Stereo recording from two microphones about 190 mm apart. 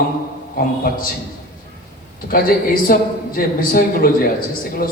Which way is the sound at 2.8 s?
50° left (ahead or behind).